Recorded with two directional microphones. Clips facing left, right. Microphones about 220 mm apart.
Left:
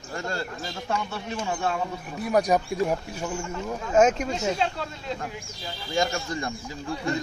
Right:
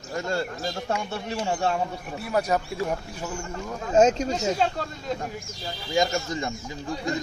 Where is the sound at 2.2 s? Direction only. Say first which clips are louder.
Left 3 dB; 15° left (ahead or behind).